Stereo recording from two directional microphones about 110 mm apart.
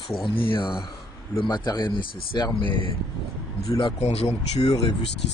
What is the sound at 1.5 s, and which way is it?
Speech, 40° left (ahead or behind).